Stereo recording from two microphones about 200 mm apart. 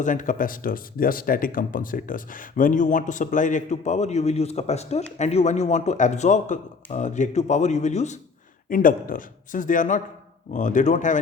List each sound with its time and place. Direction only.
0.0 s speech: 40° left (ahead or behind)